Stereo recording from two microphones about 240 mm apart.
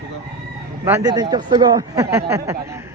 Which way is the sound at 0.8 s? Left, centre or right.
Centre.